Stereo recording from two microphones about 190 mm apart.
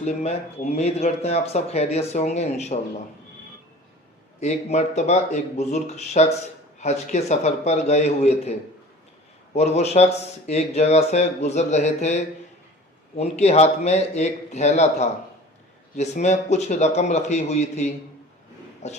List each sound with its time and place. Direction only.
0.0 s speech: 35° left (ahead or behind)
4.4 s speech: 35° left (ahead or behind)
13.1 s speech: 35° left (ahead or behind)